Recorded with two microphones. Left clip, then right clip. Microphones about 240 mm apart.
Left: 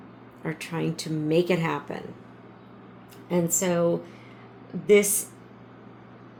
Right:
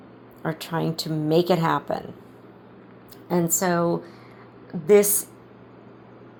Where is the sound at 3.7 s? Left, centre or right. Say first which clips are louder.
Right 1 dB; right.